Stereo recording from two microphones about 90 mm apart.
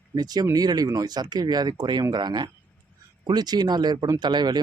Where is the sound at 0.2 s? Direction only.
50° right (ahead or behind).